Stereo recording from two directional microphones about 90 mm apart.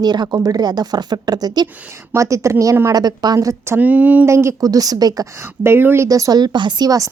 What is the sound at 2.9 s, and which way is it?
Speech, 45° right (ahead or behind).